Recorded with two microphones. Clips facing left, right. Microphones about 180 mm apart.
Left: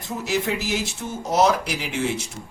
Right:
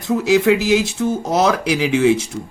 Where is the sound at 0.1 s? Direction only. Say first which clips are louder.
Right 11 dB; 90° right.